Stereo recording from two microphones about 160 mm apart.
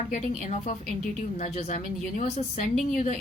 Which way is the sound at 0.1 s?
45° left (ahead or behind).